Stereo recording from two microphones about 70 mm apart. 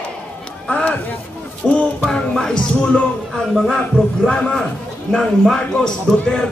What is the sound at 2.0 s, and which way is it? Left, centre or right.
Music, centre.